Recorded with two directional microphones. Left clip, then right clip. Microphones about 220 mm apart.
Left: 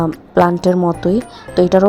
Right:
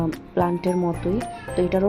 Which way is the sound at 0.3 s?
30° left (ahead or behind).